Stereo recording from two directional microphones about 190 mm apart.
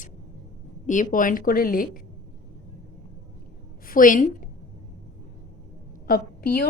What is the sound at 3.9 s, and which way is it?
Speech, 45° left (ahead or behind).